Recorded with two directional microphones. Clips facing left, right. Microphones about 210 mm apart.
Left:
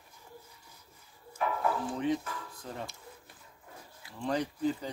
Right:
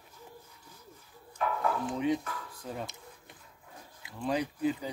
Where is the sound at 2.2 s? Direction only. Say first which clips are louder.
Right 1 dB; 10° left (ahead or behind).